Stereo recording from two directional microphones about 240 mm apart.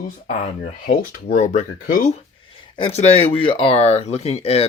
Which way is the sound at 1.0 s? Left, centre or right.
Left.